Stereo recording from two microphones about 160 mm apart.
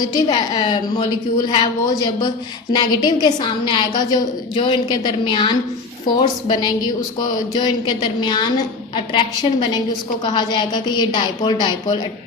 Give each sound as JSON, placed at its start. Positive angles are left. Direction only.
{"t": 0.0, "sound": "a woman's voice", "side_deg": 25}